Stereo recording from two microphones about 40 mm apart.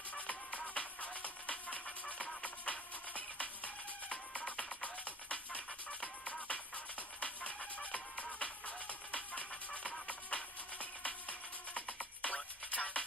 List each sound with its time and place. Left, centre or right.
0.1 s music: left
7.2 s music: left